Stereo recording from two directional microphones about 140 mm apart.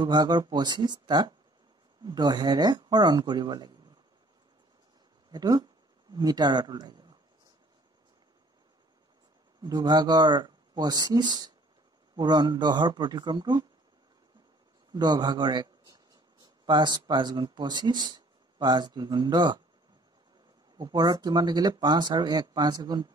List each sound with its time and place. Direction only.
0.0 s speech: 30° right (ahead or behind)
5.3 s speech: 30° right (ahead or behind)
9.6 s speech: 30° right (ahead or behind)
14.9 s a man's voice: 30° right (ahead or behind)
20.7 s speech: 30° right (ahead or behind)